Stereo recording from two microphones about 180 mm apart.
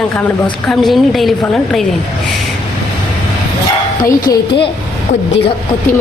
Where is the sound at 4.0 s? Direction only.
15° left (ahead or behind).